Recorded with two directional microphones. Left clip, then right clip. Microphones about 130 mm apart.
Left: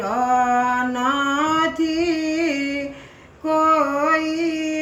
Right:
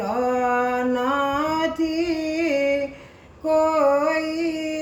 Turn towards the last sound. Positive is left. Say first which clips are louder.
# left 3 dB
turn(degrees=-40)  # may be behind; listen again after turning